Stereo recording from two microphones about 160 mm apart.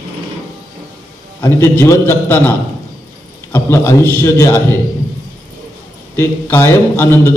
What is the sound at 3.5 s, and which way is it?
A man's voice, 15° left (ahead or behind).